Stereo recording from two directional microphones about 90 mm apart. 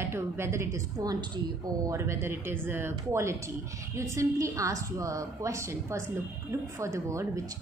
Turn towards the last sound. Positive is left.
turn(degrees=-35)  # may be behind; listen again after turning